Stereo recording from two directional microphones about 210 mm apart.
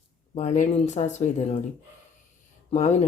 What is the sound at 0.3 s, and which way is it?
Speech, 35° left (ahead or behind).